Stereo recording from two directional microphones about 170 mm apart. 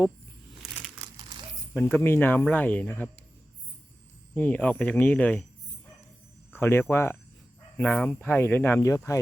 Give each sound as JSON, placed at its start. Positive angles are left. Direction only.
{"t": 1.0, "sound": "crumpling", "side_deg": -25}
{"t": 1.7, "sound": "speech", "side_deg": 15}
{"t": 4.4, "sound": "speech", "side_deg": 10}
{"t": 6.5, "sound": "speech", "side_deg": 15}